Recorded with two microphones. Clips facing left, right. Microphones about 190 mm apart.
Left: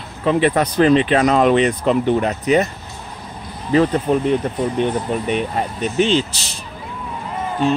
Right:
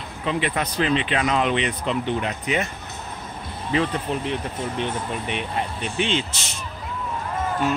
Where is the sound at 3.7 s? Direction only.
45° left (ahead or behind).